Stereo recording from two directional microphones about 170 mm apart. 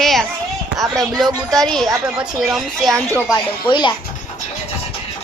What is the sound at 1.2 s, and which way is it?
A woman's voice, centre (ahead or behind).